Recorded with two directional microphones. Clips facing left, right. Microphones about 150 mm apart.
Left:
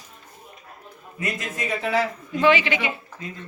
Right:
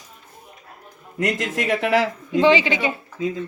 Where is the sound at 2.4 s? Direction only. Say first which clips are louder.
Right 2 dB; 30° right (ahead or behind).